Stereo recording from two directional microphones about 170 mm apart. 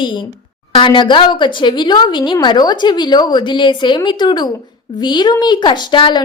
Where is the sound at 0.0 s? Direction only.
30° left (ahead or behind).